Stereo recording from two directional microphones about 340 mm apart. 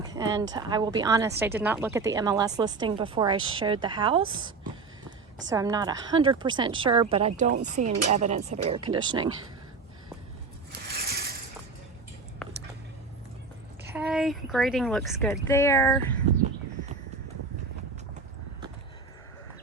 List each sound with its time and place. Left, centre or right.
0.1 s speech: centre
5.5 s speech: centre
10.7 s mechanisms: right
13.9 s speech: centre